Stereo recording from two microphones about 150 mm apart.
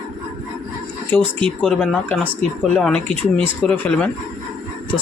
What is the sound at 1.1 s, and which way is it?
Speech, 5° left (ahead or behind).